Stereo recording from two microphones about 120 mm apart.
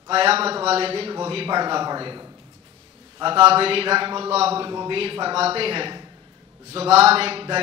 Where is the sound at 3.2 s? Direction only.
50° right (ahead or behind).